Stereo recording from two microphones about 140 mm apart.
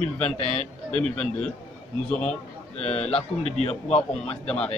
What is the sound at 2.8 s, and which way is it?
A man's voice, 50° left (ahead or behind).